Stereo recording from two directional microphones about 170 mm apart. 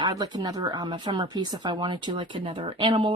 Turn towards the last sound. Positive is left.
turn(degrees=-30)  # may be behind; listen again after turning